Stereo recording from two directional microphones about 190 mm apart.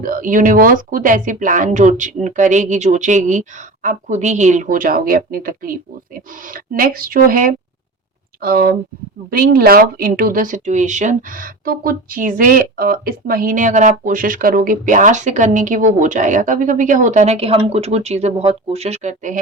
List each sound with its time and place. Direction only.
0.0 s speech: 45° right (ahead or behind)